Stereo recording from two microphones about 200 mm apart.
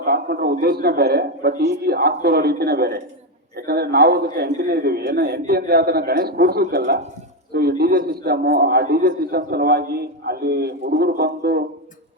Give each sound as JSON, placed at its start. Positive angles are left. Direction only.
{"t": 0.0, "sound": "a man's voice", "side_deg": -50}